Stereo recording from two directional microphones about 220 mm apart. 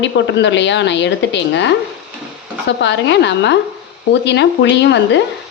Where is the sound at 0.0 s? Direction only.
55° left (ahead or behind).